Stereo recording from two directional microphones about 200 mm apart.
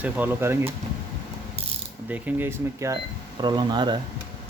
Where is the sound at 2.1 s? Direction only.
10° right (ahead or behind).